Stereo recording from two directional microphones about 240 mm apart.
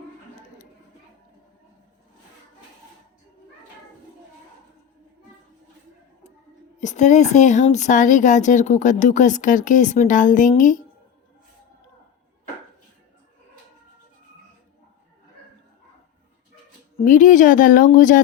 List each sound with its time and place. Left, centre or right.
6.7 s speech: left
17.0 s speech: left